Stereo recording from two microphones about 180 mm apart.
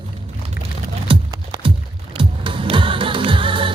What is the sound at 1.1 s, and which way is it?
Music, 30° right (ahead or behind).